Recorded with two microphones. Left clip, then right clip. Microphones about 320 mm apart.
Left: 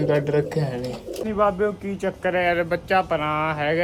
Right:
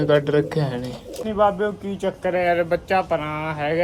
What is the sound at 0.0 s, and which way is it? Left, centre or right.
Speech, right.